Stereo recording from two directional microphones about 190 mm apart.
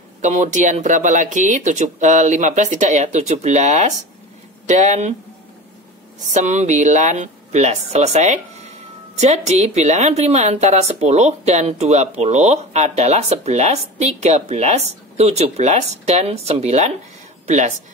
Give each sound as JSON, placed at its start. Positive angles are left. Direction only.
{"t": 0.2, "sound": "speech", "side_deg": -40}
{"t": 6.2, "sound": "speech", "side_deg": -40}